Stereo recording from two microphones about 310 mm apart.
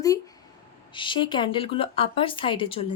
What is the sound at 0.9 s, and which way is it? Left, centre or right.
Speech, centre.